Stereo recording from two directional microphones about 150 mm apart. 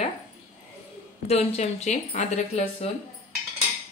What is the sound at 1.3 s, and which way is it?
Speech, 45° left (ahead or behind).